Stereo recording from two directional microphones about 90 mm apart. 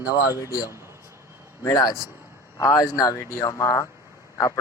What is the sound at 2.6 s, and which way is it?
Speech, 35° left (ahead or behind).